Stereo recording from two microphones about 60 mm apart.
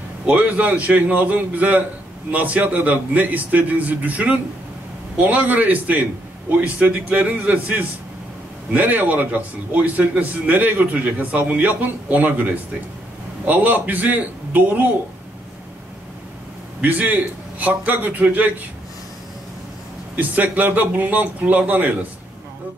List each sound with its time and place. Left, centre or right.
0.3 s a man's voice: right
8.7 s a man's voice: right
16.8 s a man's voice: right
20.2 s a man's voice: right